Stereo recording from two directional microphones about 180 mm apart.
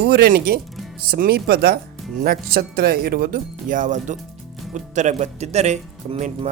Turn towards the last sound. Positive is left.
turn(degrees=-40)  # may be behind; listen again after turning